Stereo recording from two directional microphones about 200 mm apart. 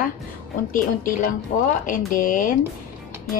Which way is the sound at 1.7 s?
45° left (ahead or behind).